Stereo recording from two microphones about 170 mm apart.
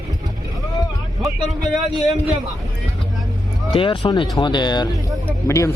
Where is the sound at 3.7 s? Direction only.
30° left (ahead or behind).